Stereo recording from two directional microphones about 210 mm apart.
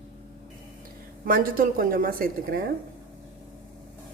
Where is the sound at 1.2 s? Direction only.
40° right (ahead or behind).